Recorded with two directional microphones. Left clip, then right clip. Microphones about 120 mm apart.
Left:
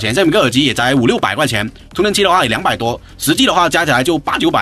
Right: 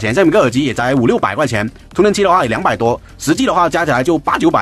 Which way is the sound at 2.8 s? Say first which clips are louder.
Right 3 dB; 65° right (ahead or behind).